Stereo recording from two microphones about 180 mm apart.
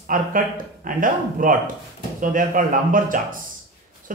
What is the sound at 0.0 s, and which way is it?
Speech, 50° right (ahead or behind).